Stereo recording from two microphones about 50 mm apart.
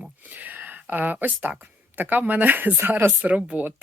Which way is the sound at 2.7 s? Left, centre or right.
Right.